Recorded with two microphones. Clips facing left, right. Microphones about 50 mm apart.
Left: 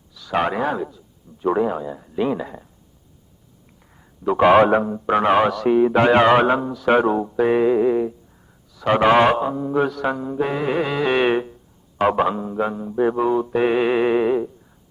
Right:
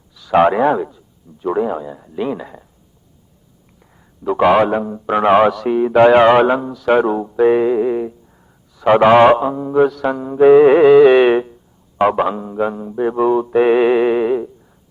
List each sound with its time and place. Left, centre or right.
0.1 s speech: centre
1.4 s a man's voice: centre
3.8 s a sound: centre
4.7 s a man's voice: centre
10.2 s a man's voice: centre
10.8 s music: centre
12.0 s a man's voice: centre